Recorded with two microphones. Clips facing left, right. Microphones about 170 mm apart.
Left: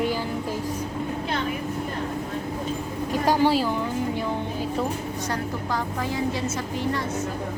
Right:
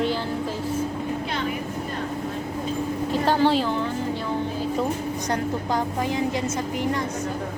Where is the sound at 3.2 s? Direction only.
10° left (ahead or behind).